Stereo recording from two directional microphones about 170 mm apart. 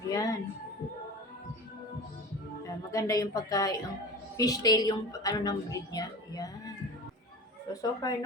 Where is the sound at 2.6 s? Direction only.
20° left (ahead or behind).